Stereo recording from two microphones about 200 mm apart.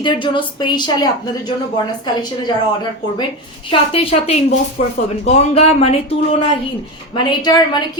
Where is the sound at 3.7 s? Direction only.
30° left (ahead or behind).